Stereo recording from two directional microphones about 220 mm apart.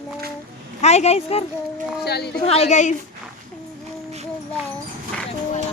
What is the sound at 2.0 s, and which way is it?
Speech, 50° left (ahead or behind).